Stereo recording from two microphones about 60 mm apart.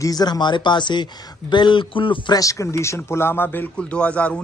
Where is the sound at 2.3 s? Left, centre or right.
Left.